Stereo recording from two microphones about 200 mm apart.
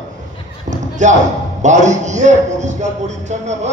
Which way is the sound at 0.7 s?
35° right (ahead or behind).